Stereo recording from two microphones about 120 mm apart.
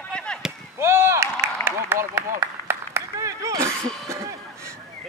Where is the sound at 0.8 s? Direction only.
20° right (ahead or behind).